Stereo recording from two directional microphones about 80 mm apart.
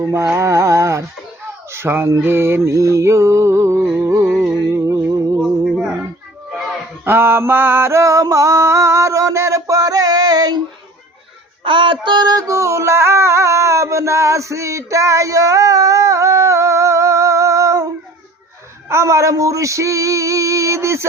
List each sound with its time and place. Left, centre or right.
0.0 s music: right
5.4 s music: centre
7.0 s mantra: right
9.6 s a sound: right
11.6 s music: right
18.9 s a sound: right